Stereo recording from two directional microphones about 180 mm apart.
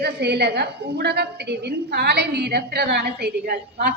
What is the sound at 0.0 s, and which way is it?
A woman's voice, 65° right (ahead or behind).